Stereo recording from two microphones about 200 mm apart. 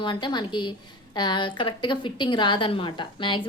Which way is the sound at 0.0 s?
25° left (ahead or behind).